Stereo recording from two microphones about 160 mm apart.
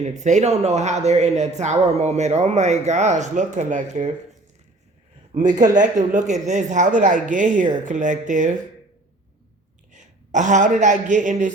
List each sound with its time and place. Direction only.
0.0 s speech: 45° right (ahead or behind)
5.6 s speech: 50° right (ahead or behind)
9.9 s a man's voice: 50° right (ahead or behind)